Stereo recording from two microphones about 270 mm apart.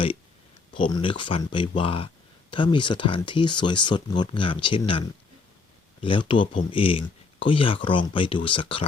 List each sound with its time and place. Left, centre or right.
0.7 s speech: centre